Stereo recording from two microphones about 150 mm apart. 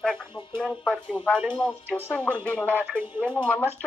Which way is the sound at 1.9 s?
10° left (ahead or behind).